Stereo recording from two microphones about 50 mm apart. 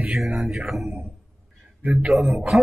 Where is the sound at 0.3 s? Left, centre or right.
Centre.